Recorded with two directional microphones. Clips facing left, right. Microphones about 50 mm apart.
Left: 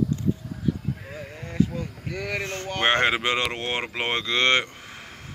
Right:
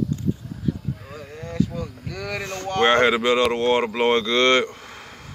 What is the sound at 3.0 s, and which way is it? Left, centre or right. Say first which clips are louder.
Speech: right 5 dB; left.